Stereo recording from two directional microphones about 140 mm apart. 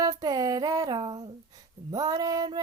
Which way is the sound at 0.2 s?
25° right (ahead or behind).